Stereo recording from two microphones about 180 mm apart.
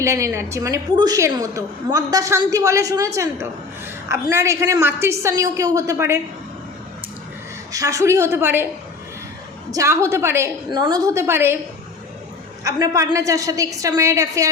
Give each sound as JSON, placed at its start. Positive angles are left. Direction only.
{"t": 0.0, "sound": "a woman's voice", "side_deg": -15}
{"t": 7.7, "sound": "a woman's voice", "side_deg": -20}
{"t": 9.7, "sound": "a woman's voice", "side_deg": -15}
{"t": 12.6, "sound": "a woman's voice", "side_deg": -20}